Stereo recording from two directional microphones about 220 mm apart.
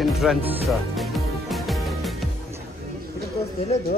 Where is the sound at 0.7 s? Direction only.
Centre (ahead or behind).